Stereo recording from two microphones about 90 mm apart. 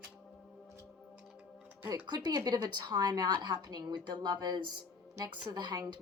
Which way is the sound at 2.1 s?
50° right (ahead or behind).